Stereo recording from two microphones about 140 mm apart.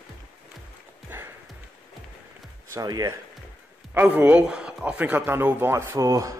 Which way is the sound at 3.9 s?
10° right (ahead or behind).